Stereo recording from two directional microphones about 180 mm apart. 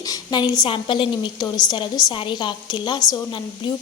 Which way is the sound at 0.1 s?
25° left (ahead or behind).